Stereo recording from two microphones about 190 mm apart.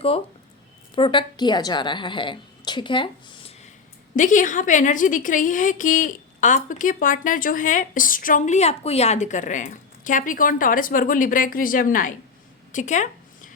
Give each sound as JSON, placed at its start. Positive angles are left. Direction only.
{"t": 0.9, "sound": "a woman's voice", "side_deg": 25}
{"t": 4.1, "sound": "a woman's voice", "side_deg": 40}
{"t": 12.7, "sound": "a sound", "side_deg": 40}